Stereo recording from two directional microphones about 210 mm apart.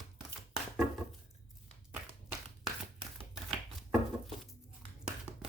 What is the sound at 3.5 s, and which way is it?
Chopping, centre (ahead or behind).